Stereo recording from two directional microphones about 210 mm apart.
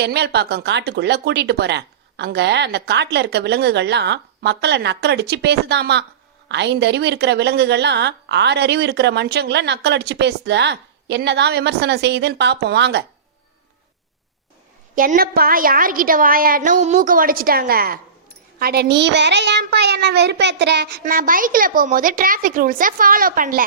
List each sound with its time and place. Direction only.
0.0 s a woman's voice: 50° right (ahead or behind)
14.9 s a woman's voice: 40° right (ahead or behind)